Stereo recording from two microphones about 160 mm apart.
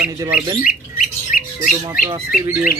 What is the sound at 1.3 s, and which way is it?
Squawk, 60° left (ahead or behind).